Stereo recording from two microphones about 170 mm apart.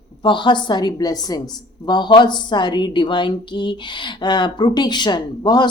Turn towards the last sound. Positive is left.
turn(degrees=25)  # may be behind; listen again after turning